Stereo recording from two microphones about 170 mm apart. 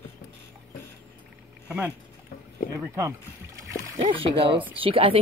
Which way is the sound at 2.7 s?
20° right (ahead or behind).